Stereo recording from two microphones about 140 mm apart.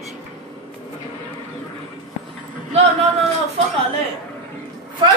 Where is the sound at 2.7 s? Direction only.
50° right (ahead or behind).